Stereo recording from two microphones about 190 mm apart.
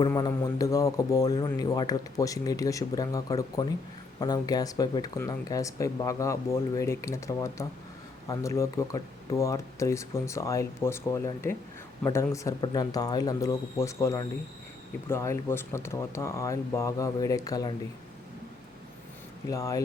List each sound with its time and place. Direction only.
0.1 s speech: 15° left (ahead or behind)
19.5 s speech: 15° left (ahead or behind)